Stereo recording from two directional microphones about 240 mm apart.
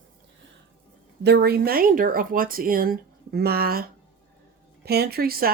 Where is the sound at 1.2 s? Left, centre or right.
Right.